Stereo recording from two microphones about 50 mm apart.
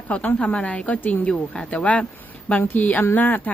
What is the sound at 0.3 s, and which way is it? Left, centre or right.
Speech, left.